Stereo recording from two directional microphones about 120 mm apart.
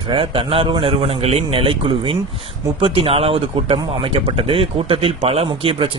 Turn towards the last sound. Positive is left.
turn(degrees=-55)  # may be behind; listen again after turning